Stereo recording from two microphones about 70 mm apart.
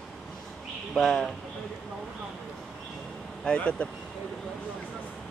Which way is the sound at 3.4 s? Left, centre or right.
Centre.